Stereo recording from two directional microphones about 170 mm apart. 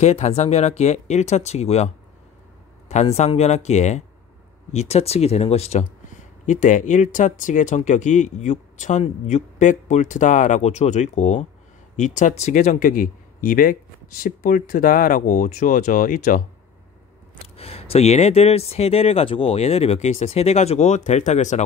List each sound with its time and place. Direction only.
0.0 s speech: 40° left (ahead or behind)
2.9 s speech: 40° left (ahead or behind)
17.4 s speech: 35° left (ahead or behind)